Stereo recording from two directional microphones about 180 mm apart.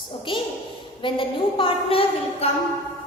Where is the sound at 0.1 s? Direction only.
30° left (ahead or behind).